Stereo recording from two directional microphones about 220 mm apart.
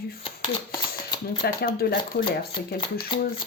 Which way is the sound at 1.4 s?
45° left (ahead or behind).